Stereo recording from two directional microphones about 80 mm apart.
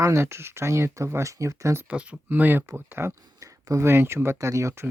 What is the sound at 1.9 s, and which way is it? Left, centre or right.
Speech, centre.